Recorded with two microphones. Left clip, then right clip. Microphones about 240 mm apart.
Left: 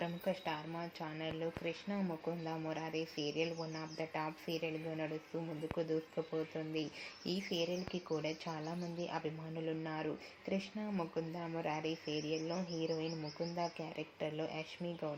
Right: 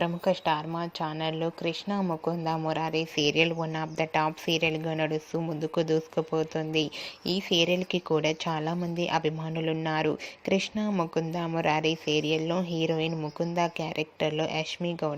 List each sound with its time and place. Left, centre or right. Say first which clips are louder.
0.0 s speech: right 13 dB; right
7.6 s speech: right 13 dB; right